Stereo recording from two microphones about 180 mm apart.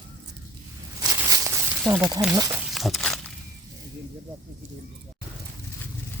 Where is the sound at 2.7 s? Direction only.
Centre (ahead or behind).